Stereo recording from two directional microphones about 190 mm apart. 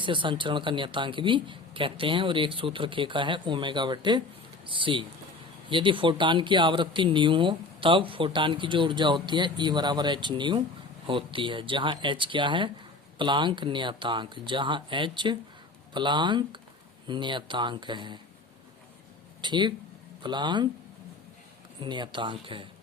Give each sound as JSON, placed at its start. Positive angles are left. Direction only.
{"t": 0.0, "sound": "speech", "side_deg": -25}
{"t": 19.4, "sound": "speech", "side_deg": -25}
{"t": 21.8, "sound": "speech", "side_deg": -25}